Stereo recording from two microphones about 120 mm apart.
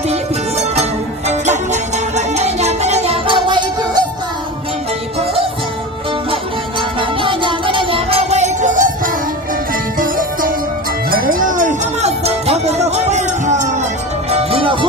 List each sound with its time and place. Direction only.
0.1 s music: 65° right (ahead or behind); by 4.0 s 40° right (ahead or behind)
6.3 s music: 45° right (ahead or behind); by 8.9 s 90° right
11.4 s music: 90° right
14.3 s music: 55° right (ahead or behind)